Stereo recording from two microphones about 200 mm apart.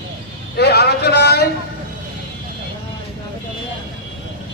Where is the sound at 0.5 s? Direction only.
55° left (ahead or behind).